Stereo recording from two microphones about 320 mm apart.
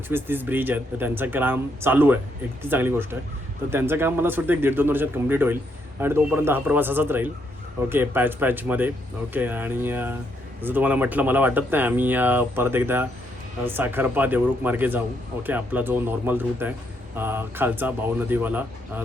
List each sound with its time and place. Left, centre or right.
0.1 s speech: centre